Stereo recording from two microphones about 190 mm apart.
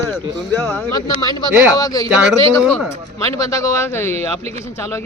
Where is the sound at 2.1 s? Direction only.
5° right (ahead or behind).